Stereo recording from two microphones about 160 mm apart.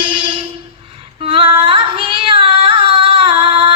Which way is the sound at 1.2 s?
35° right (ahead or behind).